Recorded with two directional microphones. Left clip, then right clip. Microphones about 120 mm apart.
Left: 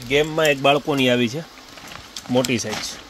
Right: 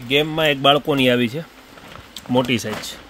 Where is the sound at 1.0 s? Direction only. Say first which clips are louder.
Right 1 dB; 10° right (ahead or behind).